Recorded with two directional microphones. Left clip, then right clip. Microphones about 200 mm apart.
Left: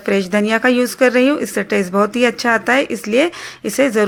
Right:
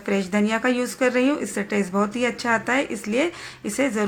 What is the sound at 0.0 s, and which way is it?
A woman's voice, 30° left (ahead or behind).